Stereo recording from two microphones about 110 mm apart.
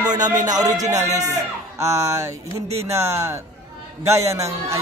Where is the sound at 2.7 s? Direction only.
75° right (ahead or behind).